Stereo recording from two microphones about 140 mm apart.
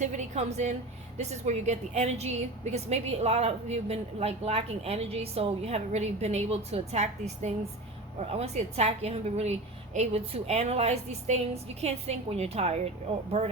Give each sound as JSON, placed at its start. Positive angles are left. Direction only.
{"t": 0.0, "sound": "a woman's voice", "side_deg": -60}